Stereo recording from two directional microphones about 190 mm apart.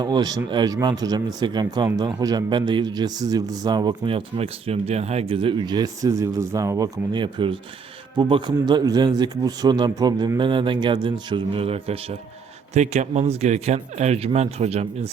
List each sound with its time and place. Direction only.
0.0 s speech: 20° right (ahead or behind)